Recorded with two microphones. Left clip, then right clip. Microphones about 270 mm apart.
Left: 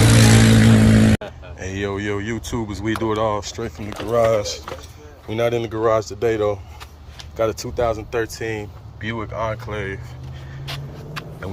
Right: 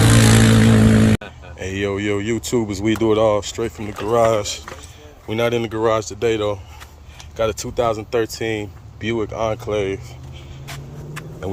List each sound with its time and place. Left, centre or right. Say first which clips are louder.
0.2 s vehicle: even; centre
0.9 s a sound: right 1 dB; centre
1.6 s speech: right 3 dB; centre